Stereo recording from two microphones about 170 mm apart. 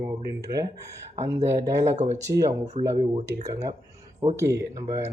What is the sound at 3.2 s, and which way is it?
Speech, 20° right (ahead or behind).